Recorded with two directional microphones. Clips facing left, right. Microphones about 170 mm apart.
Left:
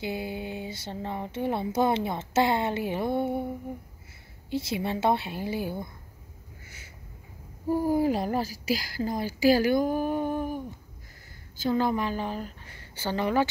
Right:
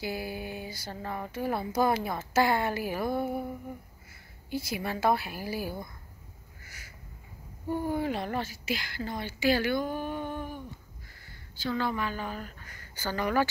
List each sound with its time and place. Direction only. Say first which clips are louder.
0.0 s speech: left 2 dB; 20° left (ahead or behind)
4.5 s speech: left 4 dB; 25° left (ahead or behind)
6.6 s a sound: even; 25° left (ahead or behind)
7.6 s a woman's voice: left 6 dB; 35° left (ahead or behind)